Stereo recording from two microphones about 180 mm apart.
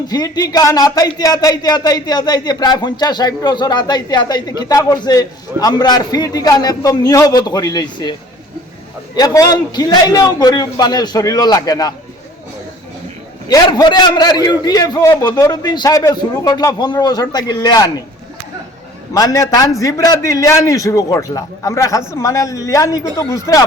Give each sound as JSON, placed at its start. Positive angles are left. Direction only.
{"t": 0.1, "sound": "speech", "side_deg": 20}
{"t": 9.1, "sound": "speech", "side_deg": 20}
{"t": 13.5, "sound": "speech", "side_deg": 20}
{"t": 19.1, "sound": "a man's voice", "side_deg": 20}